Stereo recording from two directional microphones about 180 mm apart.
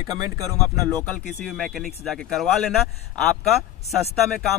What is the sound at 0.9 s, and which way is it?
Speech, 5° left (ahead or behind).